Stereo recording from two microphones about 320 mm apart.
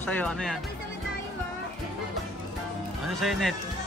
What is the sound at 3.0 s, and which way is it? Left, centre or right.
Speech, centre.